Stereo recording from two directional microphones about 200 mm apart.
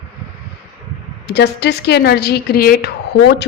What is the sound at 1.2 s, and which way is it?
A woman's voice, 55° left (ahead or behind).